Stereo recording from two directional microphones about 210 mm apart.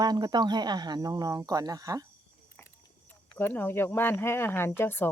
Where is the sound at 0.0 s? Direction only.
20° right (ahead or behind).